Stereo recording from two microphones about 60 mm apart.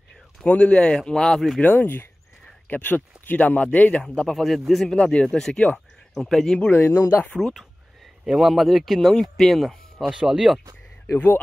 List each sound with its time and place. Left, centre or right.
0.4 s speech: centre
1.6 s speech: left
4.0 s speech: centre
4.4 s speech: centre
4.9 s speech: centre
6.7 s speech: left
8.3 s speech: centre
10.0 s speech: centre
11.1 s speech: left